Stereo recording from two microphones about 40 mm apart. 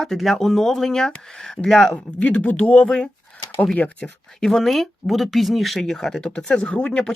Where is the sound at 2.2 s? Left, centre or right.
Left.